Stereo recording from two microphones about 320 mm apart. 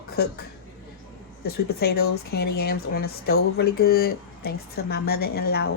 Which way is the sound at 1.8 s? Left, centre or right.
Left.